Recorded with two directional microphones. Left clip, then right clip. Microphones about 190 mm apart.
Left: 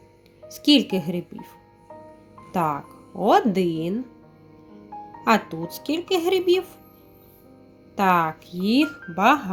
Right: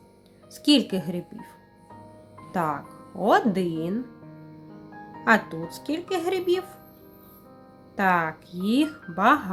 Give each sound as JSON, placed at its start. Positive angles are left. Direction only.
{"t": 0.5, "sound": "speech", "side_deg": 10}
{"t": 2.5, "sound": "speech", "side_deg": 10}
{"t": 5.2, "sound": "speech", "side_deg": 10}
{"t": 7.9, "sound": "speech", "side_deg": 10}